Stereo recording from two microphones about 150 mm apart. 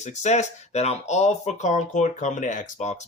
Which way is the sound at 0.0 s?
50° left (ahead or behind).